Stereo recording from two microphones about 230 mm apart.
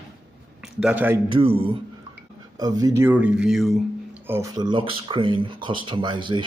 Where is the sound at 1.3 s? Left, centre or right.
Right.